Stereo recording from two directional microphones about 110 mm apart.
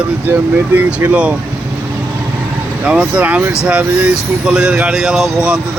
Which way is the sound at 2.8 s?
10° right (ahead or behind).